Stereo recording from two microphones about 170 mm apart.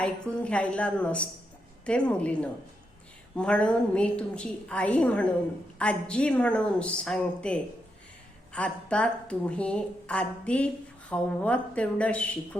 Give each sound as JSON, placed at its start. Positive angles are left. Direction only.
{"t": 0.0, "sound": "speech", "side_deg": 5}